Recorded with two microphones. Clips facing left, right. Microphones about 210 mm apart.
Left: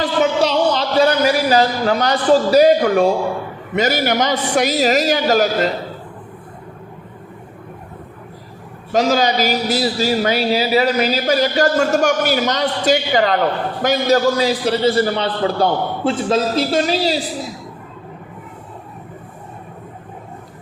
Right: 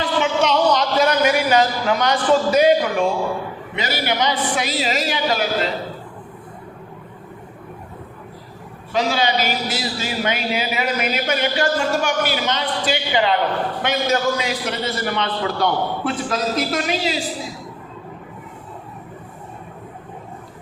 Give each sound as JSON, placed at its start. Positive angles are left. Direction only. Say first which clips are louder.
{"t": 0.0, "sound": "a sound", "louder": "left 3 dB", "side_deg": 35}
{"t": 3.8, "sound": "a man's voice", "louder": "left 6 dB", "side_deg": 45}
{"t": 8.9, "sound": "a man's voice", "louder": "left 4 dB", "side_deg": 40}